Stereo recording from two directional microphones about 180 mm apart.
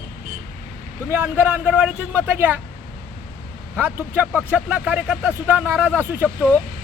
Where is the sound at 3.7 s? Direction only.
10° right (ahead or behind).